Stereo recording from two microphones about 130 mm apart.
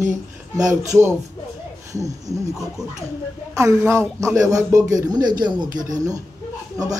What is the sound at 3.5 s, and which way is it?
Speech, 25° right (ahead or behind).